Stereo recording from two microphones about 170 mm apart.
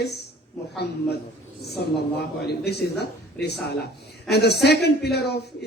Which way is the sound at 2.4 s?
75° left (ahead or behind).